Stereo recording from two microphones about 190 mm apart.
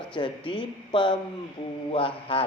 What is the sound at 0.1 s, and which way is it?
Speech, 25° left (ahead or behind).